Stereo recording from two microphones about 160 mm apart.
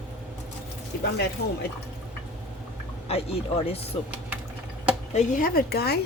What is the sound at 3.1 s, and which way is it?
Speech, 40° left (ahead or behind).